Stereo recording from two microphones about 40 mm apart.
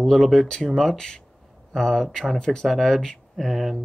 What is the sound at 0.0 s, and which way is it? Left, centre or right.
Speech, centre.